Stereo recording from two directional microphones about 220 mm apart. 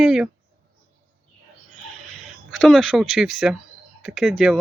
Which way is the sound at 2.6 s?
Centre (ahead or behind).